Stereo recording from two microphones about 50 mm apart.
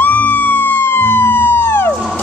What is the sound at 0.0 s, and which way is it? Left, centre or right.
Emergency vehicle, left.